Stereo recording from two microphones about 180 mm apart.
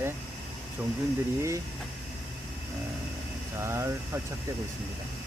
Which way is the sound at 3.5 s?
15° right (ahead or behind).